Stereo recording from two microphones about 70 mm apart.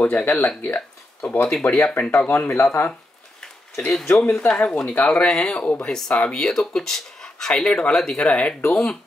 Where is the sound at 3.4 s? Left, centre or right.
Centre.